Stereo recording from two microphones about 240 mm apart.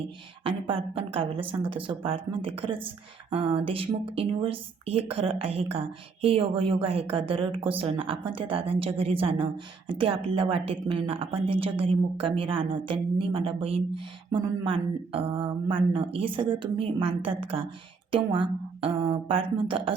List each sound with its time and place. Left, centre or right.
0.4 s a woman's voice: right